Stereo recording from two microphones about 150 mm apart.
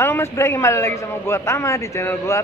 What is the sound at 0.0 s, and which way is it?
A man's voice, 15° left (ahead or behind).